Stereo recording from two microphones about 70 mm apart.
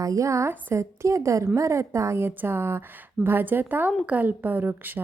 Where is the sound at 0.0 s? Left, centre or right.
Right.